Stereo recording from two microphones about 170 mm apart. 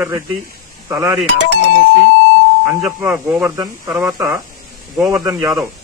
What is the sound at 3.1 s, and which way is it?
Speech, 5° right (ahead or behind).